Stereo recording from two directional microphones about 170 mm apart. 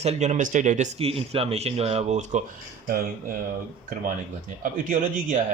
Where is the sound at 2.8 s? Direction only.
55° right (ahead or behind).